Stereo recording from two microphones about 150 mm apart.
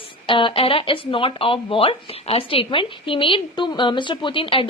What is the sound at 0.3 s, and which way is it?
Speech, 35° left (ahead or behind).